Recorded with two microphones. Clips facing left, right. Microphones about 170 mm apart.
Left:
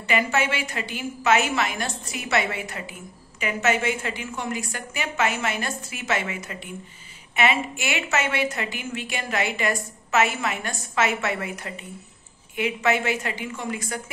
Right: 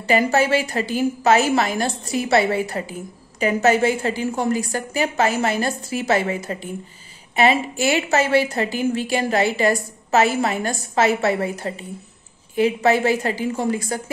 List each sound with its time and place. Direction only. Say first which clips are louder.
0.0 s a woman's voice: right 6 dB; 35° right (ahead or behind)